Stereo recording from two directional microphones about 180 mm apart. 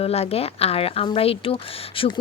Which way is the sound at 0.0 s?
35° left (ahead or behind).